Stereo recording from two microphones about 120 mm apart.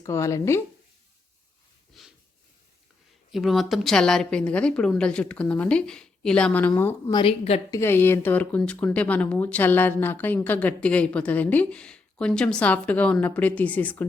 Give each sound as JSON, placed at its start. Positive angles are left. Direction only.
{"t": 0.0, "sound": "speech", "side_deg": 25}
{"t": 1.9, "sound": "snort", "side_deg": 0}
{"t": 3.3, "sound": "speech", "side_deg": 0}
{"t": 7.1, "sound": "speech", "side_deg": 45}
{"t": 7.7, "sound": "speech", "side_deg": 20}